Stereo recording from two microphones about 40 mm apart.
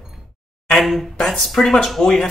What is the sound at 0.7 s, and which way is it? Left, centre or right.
Speech, centre.